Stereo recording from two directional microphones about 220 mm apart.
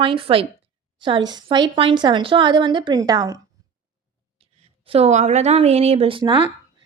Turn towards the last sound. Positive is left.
turn(degrees=-20)  # may be behind; listen again after turning